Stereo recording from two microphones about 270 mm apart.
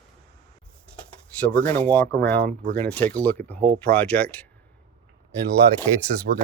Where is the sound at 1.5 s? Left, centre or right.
Centre.